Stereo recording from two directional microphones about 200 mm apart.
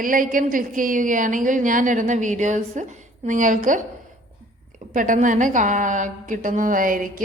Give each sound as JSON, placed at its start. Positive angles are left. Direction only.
{"t": 0.0, "sound": "a woman's voice", "side_deg": -40}
{"t": 4.9, "sound": "a woman's voice", "side_deg": -40}